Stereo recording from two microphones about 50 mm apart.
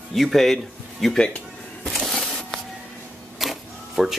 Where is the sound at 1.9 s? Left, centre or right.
Centre.